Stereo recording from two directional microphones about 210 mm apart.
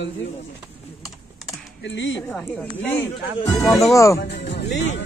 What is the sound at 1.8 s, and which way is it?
Speech, 60° left (ahead or behind).